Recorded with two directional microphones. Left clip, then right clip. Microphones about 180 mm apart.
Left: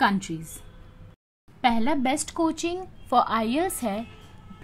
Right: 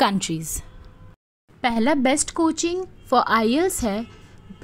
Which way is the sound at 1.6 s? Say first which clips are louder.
Right 3 dB; 30° right (ahead or behind).